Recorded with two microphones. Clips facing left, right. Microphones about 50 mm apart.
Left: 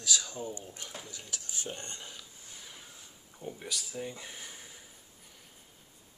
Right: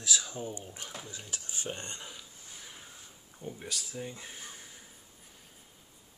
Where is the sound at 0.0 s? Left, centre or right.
Centre.